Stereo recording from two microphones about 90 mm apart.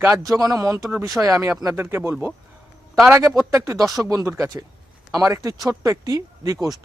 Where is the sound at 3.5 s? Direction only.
35° right (ahead or behind).